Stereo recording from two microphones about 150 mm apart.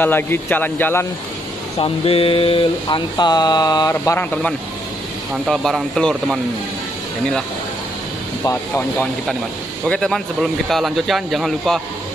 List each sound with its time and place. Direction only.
0.0 s a man's voice: 15° left (ahead or behind)
1.8 s speech: 40° left (ahead or behind)
3.9 s a man's voice: 15° left (ahead or behind)
9.8 s speech: 5° left (ahead or behind)